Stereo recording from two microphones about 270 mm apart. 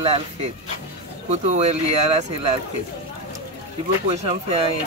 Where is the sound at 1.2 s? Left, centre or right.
Right.